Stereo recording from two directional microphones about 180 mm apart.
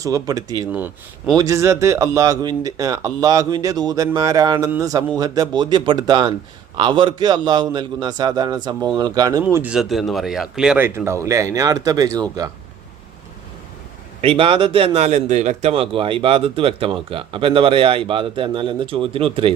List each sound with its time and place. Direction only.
0.0 s speech: 20° right (ahead or behind)
9.4 s speech: 10° right (ahead or behind)
14.2 s a man's voice: 30° right (ahead or behind)